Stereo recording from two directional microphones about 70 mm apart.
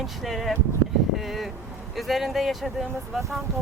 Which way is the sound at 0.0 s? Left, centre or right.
Centre.